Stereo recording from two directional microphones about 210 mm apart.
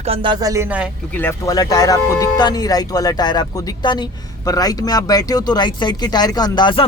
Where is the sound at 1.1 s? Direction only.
10° left (ahead or behind).